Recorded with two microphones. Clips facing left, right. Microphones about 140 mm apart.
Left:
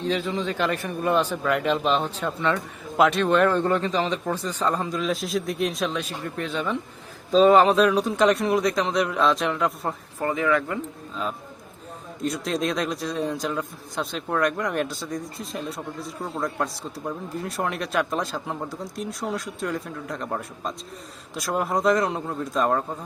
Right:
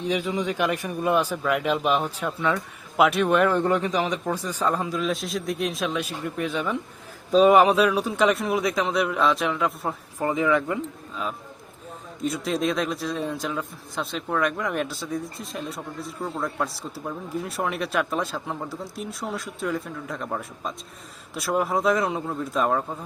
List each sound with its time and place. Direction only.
0.0 s a man's voice: 15° right (ahead or behind)
10.2 s a man's voice: 15° right (ahead or behind)
12.2 s a man's voice: centre (ahead or behind)